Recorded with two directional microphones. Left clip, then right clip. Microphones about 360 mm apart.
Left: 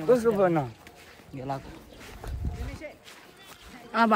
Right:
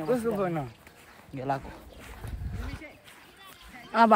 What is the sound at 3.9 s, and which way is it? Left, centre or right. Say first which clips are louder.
Speech: right 2 dB; centre.